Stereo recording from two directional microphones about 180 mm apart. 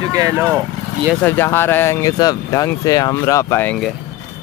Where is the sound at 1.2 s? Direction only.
10° left (ahead or behind).